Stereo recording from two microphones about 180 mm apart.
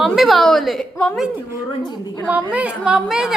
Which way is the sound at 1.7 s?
25° left (ahead or behind).